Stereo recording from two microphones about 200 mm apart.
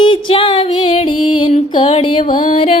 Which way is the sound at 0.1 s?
25° left (ahead or behind).